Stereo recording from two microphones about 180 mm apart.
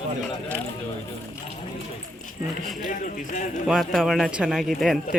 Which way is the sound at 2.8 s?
50° left (ahead or behind).